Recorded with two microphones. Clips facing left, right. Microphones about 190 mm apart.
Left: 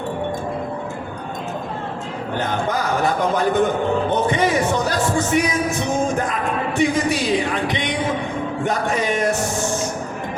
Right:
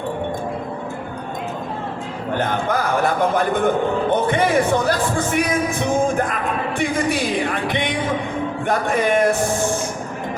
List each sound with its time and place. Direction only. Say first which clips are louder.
2.4 s speech: right 1 dB; 55° right (ahead or behind)